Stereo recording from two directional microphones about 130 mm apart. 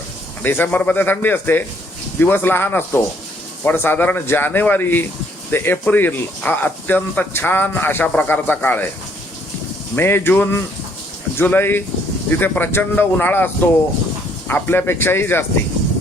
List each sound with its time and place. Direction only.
0.4 s speech: 15° left (ahead or behind)
9.9 s speech: 15° left (ahead or behind)